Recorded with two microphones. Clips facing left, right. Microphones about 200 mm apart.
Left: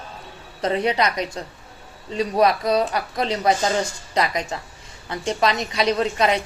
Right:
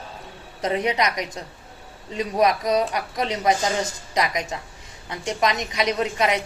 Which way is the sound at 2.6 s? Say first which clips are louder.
Left 1 dB; 15° right (ahead or behind).